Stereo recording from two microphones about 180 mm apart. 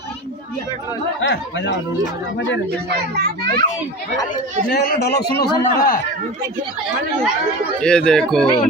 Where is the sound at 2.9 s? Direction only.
60° right (ahead or behind).